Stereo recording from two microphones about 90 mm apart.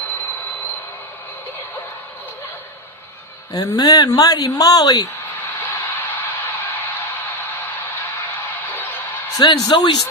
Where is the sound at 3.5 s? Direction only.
45° left (ahead or behind).